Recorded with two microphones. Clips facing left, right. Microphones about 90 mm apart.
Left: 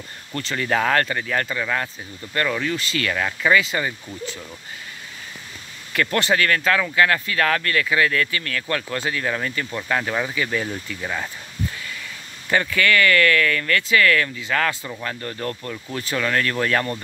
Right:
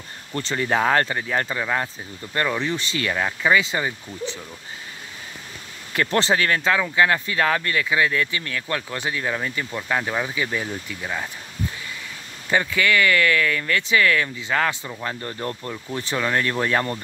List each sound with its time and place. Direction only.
0.4 s speech: 25° right (ahead or behind)
5.9 s speech: 25° right (ahead or behind); by 11.2 s 5° right (ahead or behind)
12.4 s speech: 15° right (ahead or behind)